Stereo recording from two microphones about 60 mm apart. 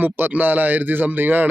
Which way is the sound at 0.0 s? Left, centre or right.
Right.